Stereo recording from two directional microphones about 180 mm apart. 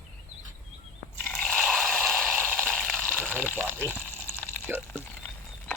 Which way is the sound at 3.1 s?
10° right (ahead or behind).